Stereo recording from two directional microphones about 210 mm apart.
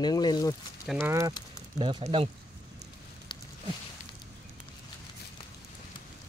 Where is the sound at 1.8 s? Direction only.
25° right (ahead or behind).